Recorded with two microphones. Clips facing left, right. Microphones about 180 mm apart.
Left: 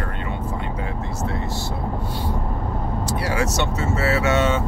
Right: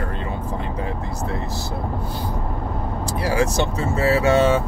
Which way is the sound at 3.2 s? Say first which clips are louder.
Right 4 dB; 35° right (ahead or behind).